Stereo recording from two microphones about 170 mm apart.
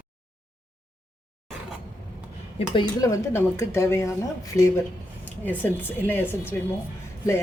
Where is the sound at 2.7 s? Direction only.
20° left (ahead or behind).